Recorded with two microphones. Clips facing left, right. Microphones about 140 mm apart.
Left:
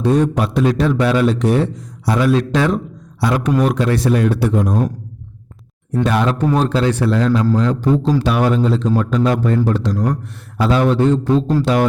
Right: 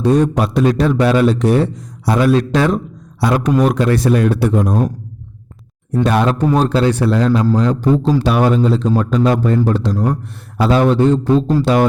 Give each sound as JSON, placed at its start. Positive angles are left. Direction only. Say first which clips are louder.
{"t": 0.0, "sound": "a man's voice", "louder": "right 2 dB", "side_deg": -40}
{"t": 6.0, "sound": "a man's voice", "louder": "right 2 dB", "side_deg": -40}